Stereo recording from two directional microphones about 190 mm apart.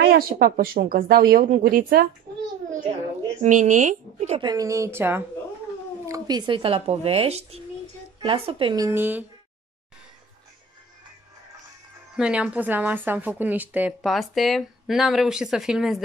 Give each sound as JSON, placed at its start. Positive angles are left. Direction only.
{"t": 0.0, "sound": "speech", "side_deg": -50}
{"t": 3.4, "sound": "speech", "side_deg": -40}
{"t": 4.4, "sound": "a woman's voice", "side_deg": -20}
{"t": 12.2, "sound": "a woman's voice", "side_deg": -5}